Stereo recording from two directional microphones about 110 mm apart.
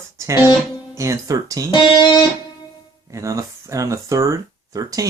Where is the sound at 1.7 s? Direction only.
45° left (ahead or behind).